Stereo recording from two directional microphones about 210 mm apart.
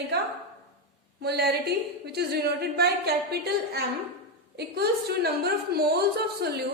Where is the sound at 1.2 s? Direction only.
50° right (ahead or behind).